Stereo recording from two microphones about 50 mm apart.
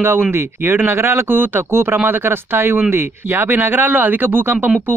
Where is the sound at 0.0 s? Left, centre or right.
Right.